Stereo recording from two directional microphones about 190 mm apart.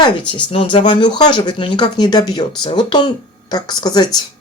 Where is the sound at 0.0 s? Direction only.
25° left (ahead or behind).